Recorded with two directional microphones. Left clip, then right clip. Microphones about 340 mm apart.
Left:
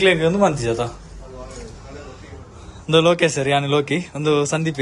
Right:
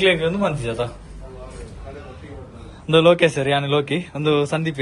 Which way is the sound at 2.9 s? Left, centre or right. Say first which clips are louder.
Right 1 dB; centre.